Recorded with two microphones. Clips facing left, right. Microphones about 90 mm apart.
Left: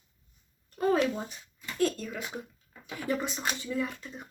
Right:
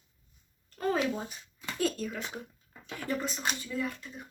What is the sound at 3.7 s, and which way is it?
Speech, 20° left (ahead or behind).